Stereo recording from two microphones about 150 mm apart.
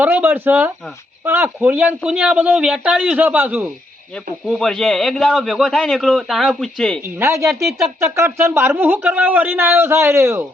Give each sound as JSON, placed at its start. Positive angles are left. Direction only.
{"t": 0.0, "sound": "speech", "side_deg": -10}
{"t": 4.4, "sound": "a man's voice", "side_deg": 0}
{"t": 7.2, "sound": "speech", "side_deg": -20}